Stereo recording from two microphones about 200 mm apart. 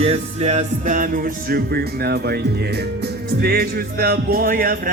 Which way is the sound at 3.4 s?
50° right (ahead or behind).